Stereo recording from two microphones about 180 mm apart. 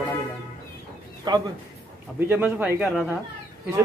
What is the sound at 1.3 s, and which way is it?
Speech, 25° right (ahead or behind).